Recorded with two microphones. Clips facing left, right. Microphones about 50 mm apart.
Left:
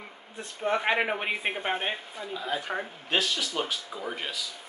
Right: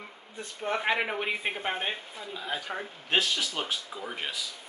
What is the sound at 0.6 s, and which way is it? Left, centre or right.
Speech, centre.